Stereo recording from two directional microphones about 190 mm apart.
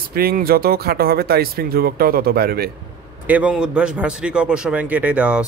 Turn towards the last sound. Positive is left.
turn(degrees=-5)  # may be behind; listen again after turning